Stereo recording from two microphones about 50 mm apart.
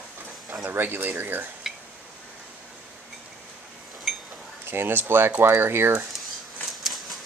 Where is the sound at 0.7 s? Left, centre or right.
Right.